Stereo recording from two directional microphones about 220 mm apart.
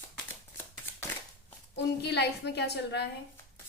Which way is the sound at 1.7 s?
50° left (ahead or behind).